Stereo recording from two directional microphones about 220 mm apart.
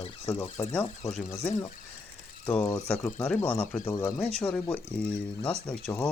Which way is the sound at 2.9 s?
10° left (ahead or behind).